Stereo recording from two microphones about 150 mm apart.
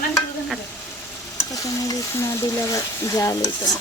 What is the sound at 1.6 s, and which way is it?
Speech, 20° left (ahead or behind).